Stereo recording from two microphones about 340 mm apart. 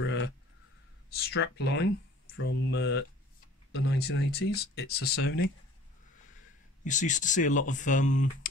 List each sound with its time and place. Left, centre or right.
0.0 s a sound: left
1.1 s speech: left
6.8 s speech: left